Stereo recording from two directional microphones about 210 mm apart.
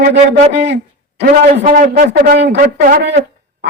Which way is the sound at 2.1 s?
55° right (ahead or behind).